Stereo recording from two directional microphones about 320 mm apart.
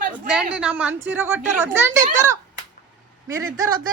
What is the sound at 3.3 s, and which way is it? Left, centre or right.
Speech, centre.